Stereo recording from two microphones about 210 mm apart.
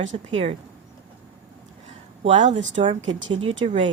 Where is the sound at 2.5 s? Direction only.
60° right (ahead or behind).